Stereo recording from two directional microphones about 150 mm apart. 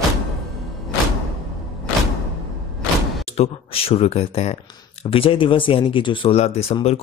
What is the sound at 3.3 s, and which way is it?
Speech, 40° left (ahead or behind).